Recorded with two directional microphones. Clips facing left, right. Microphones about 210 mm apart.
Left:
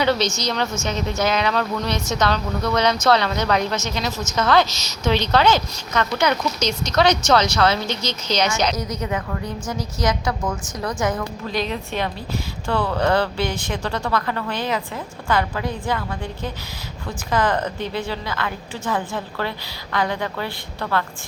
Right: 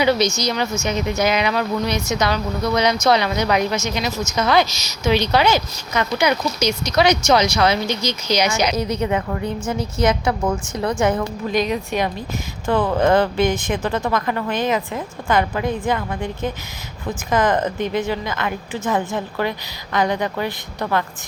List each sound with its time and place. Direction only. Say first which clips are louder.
0.0 s speech: right 3 dB; 10° right (ahead or behind)
8.7 s speech: right 5 dB; 30° right (ahead or behind)
11.4 s speech: right 5 dB; 15° right (ahead or behind)